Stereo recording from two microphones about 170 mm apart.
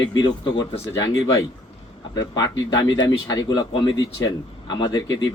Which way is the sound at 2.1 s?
20° left (ahead or behind).